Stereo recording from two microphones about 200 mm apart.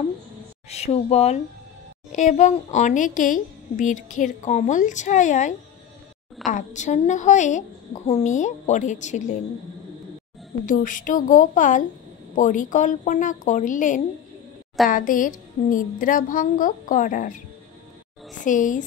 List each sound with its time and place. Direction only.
0.7 s a woman's voice: 30° left (ahead or behind)
6.5 s a woman's voice: 35° left (ahead or behind)
10.6 s a woman's voice: 40° left (ahead or behind)
18.4 s a woman's voice: 40° left (ahead or behind)